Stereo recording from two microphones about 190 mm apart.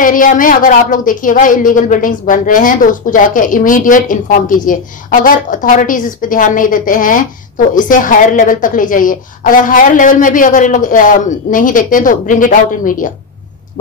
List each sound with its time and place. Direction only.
0.0 s a woman's voice: 45° left (ahead or behind)